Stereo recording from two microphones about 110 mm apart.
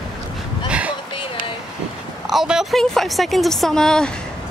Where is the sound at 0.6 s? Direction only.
10° right (ahead or behind).